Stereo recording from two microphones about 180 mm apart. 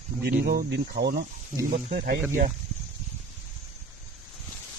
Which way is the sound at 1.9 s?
50° right (ahead or behind).